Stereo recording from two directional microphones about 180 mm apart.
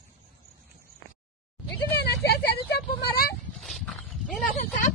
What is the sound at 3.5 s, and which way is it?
Dog, centre (ahead or behind).